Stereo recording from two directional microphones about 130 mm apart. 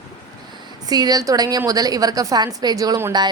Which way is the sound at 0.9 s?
30° right (ahead or behind).